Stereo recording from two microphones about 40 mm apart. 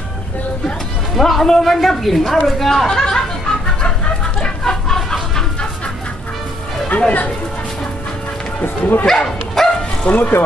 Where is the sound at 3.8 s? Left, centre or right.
Centre.